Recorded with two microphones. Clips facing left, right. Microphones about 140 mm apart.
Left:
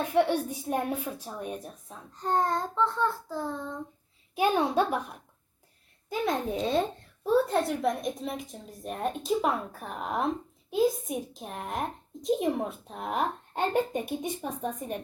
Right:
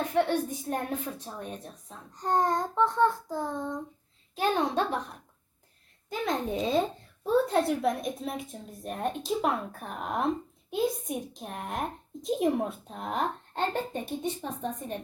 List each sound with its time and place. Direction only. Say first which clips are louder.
0.1 s a woman's voice: left 3 dB; 10° left (ahead or behind)
2.1 s a child's voice: right 1 dB; 15° right (ahead or behind)
4.4 s a woman's voice: left 2 dB; 10° left (ahead or behind)